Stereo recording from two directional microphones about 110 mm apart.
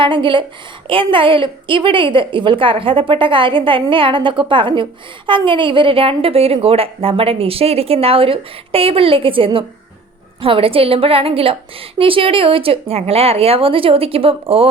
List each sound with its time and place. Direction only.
0.0 s a woman's voice: 50° right (ahead or behind)